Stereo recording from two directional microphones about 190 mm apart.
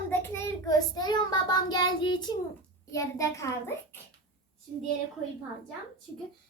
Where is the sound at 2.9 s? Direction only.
15° left (ahead or behind).